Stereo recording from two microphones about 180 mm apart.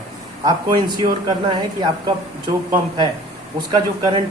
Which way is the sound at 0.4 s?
25° right (ahead or behind).